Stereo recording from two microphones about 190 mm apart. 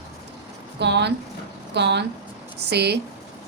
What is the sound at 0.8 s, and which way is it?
A woman's voice, 65° right (ahead or behind).